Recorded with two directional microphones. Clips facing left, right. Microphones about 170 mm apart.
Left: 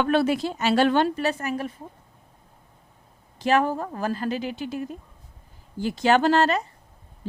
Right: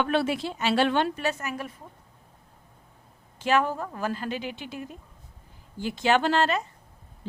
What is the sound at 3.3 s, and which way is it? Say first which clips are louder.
A woman's voice: left 3 dB; 35° left (ahead or behind).